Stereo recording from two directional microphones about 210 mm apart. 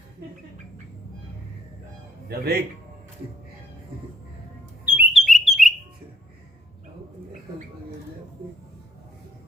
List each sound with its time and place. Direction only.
2.3 s speech: 50° right (ahead or behind)
4.9 s bird: 10° right (ahead or behind)